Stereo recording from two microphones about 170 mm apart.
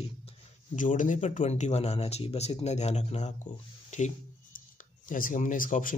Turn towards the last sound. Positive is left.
turn(degrees=55)  # may be behind; listen again after turning